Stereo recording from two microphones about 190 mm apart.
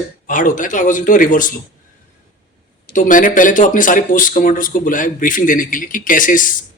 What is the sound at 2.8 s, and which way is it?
Speech, 45° left (ahead or behind).